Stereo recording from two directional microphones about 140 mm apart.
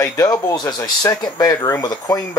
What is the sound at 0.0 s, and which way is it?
Speech, 25° left (ahead or behind).